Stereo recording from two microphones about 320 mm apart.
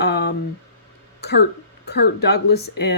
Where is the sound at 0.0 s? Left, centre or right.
Left.